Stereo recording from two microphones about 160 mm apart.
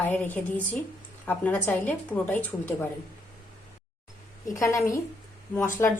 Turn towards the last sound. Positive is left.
turn(degrees=15)  # may be behind; listen again after turning